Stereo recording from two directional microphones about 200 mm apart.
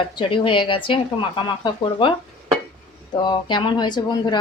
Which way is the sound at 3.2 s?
25° left (ahead or behind).